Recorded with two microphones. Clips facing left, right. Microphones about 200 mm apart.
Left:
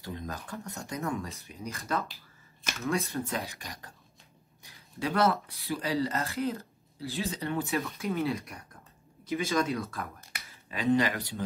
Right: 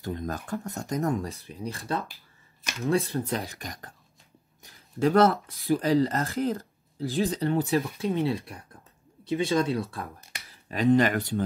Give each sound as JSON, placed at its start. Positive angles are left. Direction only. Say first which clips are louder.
{"t": 0.0, "sound": "speech", "louder": "right 6 dB", "side_deg": -50}
{"t": 10.7, "sound": "speech", "louder": "right 5 dB", "side_deg": -45}